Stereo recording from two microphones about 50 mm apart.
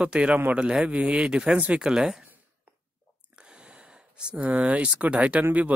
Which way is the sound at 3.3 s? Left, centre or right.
Centre.